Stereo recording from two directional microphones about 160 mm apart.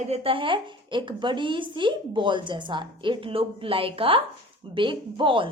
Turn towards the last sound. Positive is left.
turn(degrees=-30)  # may be behind; listen again after turning